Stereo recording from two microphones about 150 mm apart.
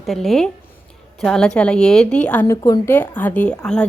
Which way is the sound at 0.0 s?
Centre (ahead or behind).